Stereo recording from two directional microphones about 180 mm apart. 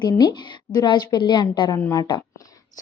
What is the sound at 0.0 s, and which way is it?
A woman's voice, 25° left (ahead or behind).